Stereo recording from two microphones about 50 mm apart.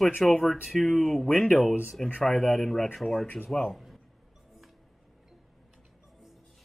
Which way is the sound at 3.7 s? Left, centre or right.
Centre.